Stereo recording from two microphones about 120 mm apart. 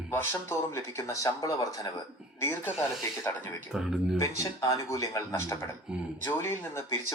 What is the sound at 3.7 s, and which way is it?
Speech, 5° right (ahead or behind).